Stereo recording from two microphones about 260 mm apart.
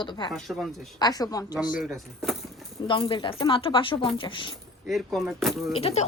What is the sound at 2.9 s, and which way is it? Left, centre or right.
Speech, centre.